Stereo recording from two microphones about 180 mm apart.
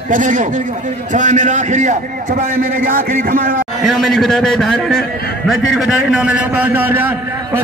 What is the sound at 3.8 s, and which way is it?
A man's voice, centre (ahead or behind).